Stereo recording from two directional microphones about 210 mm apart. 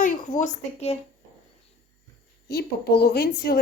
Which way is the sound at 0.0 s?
35° left (ahead or behind).